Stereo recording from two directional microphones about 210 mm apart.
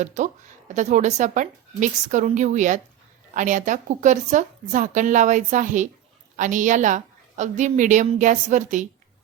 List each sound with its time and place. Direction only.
0.0 s a woman's voice: 35° right (ahead or behind)